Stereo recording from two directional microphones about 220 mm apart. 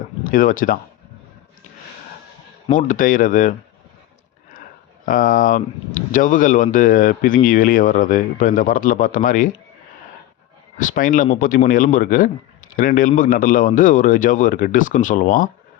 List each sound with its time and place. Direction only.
0.3 s speech: 40° left (ahead or behind)
2.7 s speech: 35° left (ahead or behind)
5.0 s speech: 40° left (ahead or behind)
10.8 s speech: 35° left (ahead or behind)